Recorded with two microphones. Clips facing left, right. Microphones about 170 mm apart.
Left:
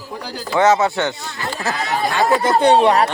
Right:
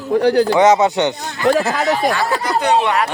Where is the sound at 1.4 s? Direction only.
80° right.